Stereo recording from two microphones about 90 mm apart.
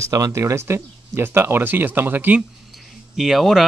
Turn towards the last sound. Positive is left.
turn(degrees=0)  # may be behind; listen again after turning